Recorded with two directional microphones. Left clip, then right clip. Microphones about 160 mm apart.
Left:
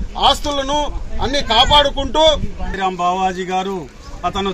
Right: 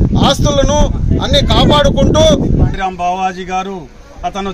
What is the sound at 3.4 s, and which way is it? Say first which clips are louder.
Speech: right 2 dB; 20° right (ahead or behind).